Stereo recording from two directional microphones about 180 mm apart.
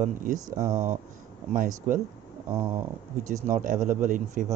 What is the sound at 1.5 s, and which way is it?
Speech, 45° right (ahead or behind).